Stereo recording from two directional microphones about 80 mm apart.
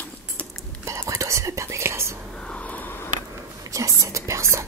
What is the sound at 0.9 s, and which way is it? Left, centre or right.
Whispering, right.